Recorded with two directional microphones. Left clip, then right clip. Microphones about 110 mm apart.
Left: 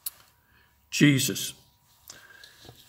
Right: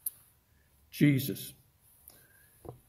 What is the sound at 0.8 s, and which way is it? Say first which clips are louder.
Speech: left 7 dB; 25° left (ahead or behind).